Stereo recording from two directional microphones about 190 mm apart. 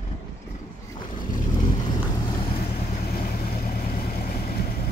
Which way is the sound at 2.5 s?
50° left (ahead or behind).